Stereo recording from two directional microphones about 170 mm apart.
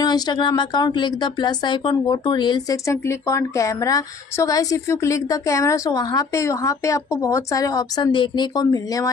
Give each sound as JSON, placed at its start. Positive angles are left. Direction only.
{"t": 0.0, "sound": "speech", "side_deg": 25}